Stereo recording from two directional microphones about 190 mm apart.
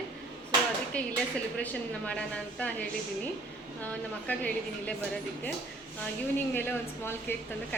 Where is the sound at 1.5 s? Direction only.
5° left (ahead or behind).